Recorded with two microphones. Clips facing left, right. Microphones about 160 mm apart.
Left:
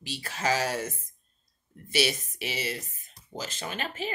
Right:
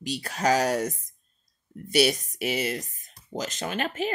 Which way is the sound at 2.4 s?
50° right (ahead or behind).